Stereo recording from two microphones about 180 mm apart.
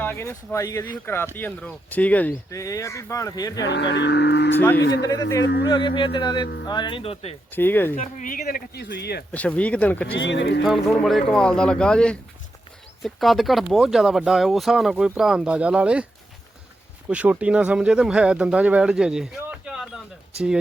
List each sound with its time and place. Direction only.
0.0 s speech: 15° left (ahead or behind)
3.6 s speech: 75° left (ahead or behind)
4.5 s speech: 10° left (ahead or behind)
5.7 s speech: 25° left (ahead or behind)
7.5 s speech: 10° left (ahead or behind)
7.9 s speech: 50° left (ahead or behind); by 9.2 s 65° left (ahead or behind)
9.3 s speech: 10° left (ahead or behind)
10.2 s speech: 85° left
10.6 s speech: centre (ahead or behind)
17.1 s speech: 5° right (ahead or behind)